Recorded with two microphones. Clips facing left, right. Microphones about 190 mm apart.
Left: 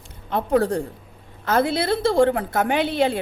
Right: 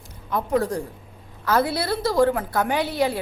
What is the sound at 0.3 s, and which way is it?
A woman's voice, 30° left (ahead or behind).